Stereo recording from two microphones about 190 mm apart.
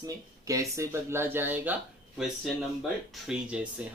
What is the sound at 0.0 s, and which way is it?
Speech, 15° right (ahead or behind).